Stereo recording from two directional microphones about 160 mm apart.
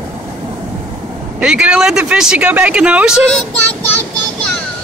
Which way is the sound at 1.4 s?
5° right (ahead or behind).